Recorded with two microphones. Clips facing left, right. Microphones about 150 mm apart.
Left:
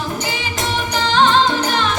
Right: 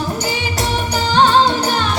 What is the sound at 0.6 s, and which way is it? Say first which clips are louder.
Music: even; 40° right (ahead or behind).